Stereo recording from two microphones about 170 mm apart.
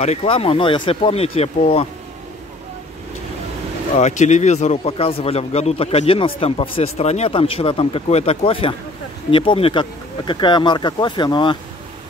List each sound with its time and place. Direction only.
0.0 s speech: 35° left (ahead or behind)
3.9 s speech: 45° left (ahead or behind); by 11.5 s 25° left (ahead or behind)